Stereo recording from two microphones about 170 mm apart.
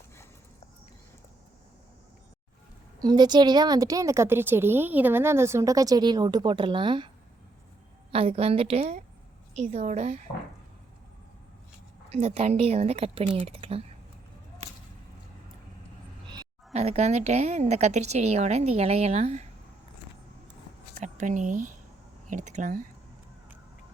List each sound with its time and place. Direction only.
3.0 s a woman's voice: 25° right (ahead or behind)
8.1 s a woman's voice: 35° right (ahead or behind)
12.1 s a woman's voice: 40° right (ahead or behind)
16.7 s a woman's voice: 40° right (ahead or behind)
20.9 s speech: 45° right (ahead or behind)